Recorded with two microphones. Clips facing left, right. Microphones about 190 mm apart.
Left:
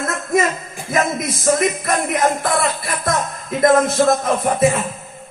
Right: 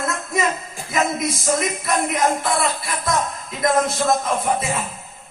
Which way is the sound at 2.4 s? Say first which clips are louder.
Left 2 dB; 50° left (ahead or behind).